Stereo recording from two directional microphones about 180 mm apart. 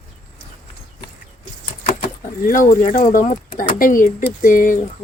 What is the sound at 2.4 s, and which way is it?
Speech, 50° left (ahead or behind).